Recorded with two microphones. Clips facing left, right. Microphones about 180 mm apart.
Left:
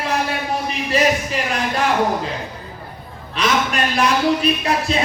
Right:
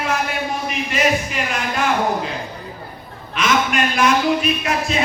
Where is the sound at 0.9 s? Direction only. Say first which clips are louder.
Left 2 dB; 35° left (ahead or behind).